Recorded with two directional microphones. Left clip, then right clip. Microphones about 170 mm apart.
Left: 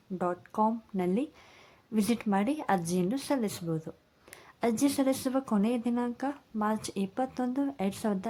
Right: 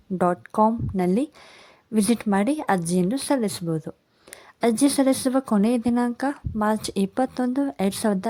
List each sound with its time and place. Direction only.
0.2 s speech: 40° right (ahead or behind)